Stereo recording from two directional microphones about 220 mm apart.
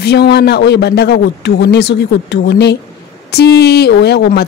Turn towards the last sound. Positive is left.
turn(degrees=50)  # may be behind; listen again after turning